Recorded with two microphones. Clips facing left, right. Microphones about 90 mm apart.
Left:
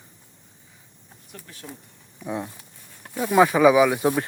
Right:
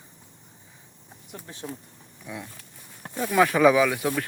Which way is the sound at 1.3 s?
25° right (ahead or behind).